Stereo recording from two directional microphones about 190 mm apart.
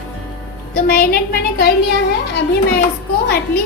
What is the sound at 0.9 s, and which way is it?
A child's voice, 50° left (ahead or behind).